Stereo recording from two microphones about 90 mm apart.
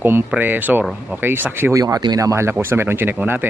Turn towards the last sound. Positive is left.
turn(degrees=-25)  # may be behind; listen again after turning